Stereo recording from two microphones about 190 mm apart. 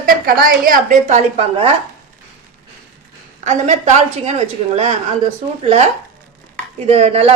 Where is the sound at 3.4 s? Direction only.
40° right (ahead or behind).